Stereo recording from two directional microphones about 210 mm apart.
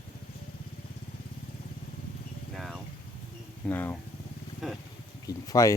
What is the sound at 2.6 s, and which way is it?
Vehicle, centre (ahead or behind).